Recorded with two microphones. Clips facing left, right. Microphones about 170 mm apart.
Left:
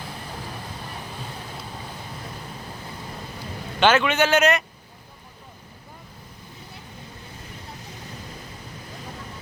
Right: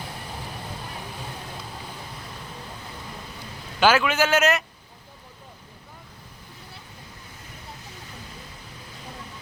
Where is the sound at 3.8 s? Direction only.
5° right (ahead or behind).